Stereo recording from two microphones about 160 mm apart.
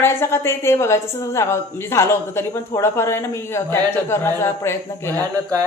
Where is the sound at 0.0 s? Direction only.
15° left (ahead or behind).